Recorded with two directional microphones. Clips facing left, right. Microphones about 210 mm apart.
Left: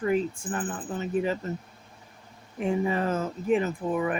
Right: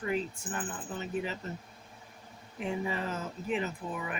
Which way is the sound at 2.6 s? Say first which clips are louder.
Left 8 dB; 50° left (ahead or behind).